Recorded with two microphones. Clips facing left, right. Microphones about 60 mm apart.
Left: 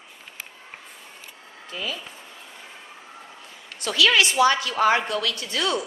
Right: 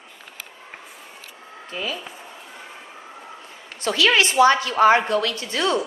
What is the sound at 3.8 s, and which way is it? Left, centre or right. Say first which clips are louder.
A woman's voice: right 1 dB; right.